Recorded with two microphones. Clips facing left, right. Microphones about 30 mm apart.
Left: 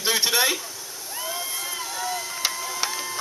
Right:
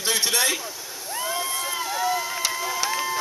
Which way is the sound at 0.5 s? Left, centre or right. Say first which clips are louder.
Right 1 dB; centre.